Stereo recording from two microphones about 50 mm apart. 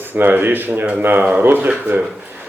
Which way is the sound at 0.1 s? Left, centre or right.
Right.